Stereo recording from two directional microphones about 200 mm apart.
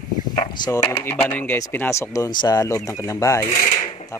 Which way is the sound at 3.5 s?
40° left (ahead or behind).